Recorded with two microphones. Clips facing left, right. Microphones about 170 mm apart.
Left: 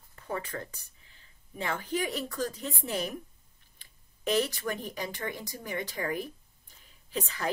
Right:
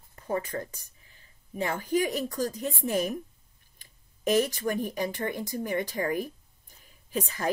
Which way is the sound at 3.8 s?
45° right (ahead or behind).